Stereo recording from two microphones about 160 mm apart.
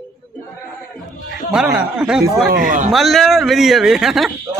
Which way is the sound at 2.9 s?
Centre (ahead or behind).